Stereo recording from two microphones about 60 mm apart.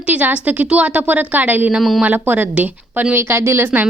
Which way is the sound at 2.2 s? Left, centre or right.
Right.